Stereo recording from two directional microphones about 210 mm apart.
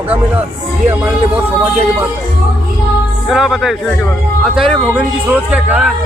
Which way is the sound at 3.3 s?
Centre (ahead or behind).